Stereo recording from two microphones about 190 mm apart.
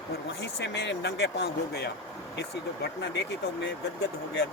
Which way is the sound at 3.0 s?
65° left (ahead or behind).